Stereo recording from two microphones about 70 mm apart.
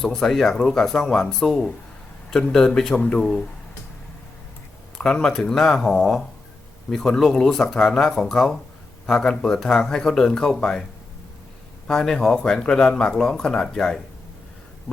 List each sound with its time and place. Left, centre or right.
0.0 s speech: centre
4.9 s speech: centre
11.9 s speech: centre